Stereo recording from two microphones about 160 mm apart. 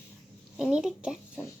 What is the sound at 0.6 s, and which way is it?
Speech, 5° right (ahead or behind).